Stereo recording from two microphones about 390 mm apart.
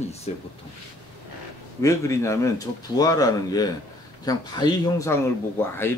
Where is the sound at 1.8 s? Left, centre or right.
Centre.